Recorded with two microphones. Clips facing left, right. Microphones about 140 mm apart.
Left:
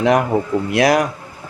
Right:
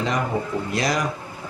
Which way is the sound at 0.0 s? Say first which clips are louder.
Left 8 dB; 65° left (ahead or behind).